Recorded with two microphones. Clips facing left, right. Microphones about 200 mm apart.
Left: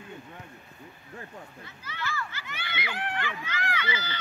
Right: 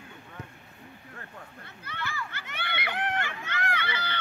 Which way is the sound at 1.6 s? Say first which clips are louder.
Even; 60° right (ahead or behind).